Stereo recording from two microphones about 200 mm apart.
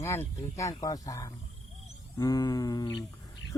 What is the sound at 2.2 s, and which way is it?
Humming, 20° left (ahead or behind).